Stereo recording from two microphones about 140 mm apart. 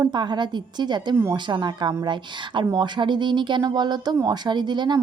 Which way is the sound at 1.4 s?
30° right (ahead or behind).